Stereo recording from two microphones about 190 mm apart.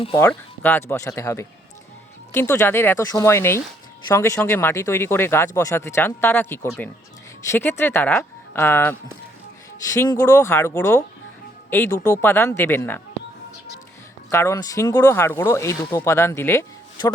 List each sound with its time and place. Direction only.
0.2 s speech: 10° left (ahead or behind)
14.3 s speech: 15° left (ahead or behind)